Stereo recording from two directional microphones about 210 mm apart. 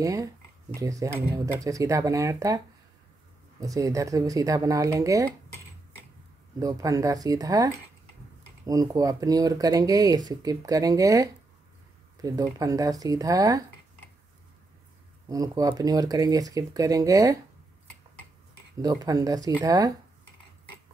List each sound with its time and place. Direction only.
0.0 s speech: 15° right (ahead or behind)
3.6 s speech: 15° right (ahead or behind)
6.6 s speech: 15° right (ahead or behind)
15.2 s speech: 15° right (ahead or behind)
18.8 s speech: 15° right (ahead or behind)